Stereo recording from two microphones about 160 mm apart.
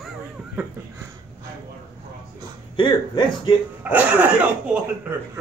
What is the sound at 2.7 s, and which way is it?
Speech, 30° left (ahead or behind).